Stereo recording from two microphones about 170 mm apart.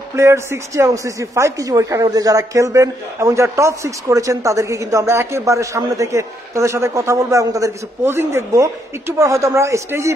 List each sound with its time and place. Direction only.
0.1 s speech: 15° right (ahead or behind)